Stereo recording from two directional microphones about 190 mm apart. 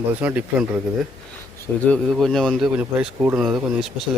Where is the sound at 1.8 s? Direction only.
5° left (ahead or behind).